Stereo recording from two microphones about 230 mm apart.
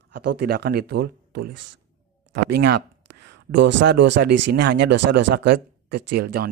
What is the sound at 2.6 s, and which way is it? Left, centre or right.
Speech, right.